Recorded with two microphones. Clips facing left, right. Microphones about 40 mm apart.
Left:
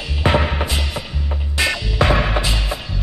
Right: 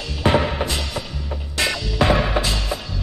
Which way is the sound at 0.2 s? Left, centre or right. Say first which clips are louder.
Even; centre.